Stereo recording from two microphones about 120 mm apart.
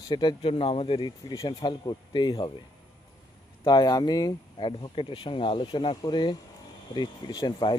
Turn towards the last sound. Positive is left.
turn(degrees=40)  # may be behind; listen again after turning